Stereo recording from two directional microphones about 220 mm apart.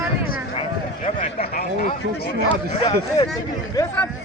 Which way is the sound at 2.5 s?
20° left (ahead or behind).